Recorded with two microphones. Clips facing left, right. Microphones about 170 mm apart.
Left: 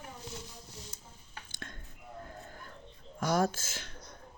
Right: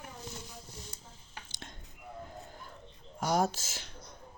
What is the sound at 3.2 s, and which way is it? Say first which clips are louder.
Speech: even; 50° left (ahead or behind).